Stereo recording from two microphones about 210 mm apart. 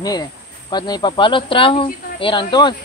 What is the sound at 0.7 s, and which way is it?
Speech, 20° left (ahead or behind).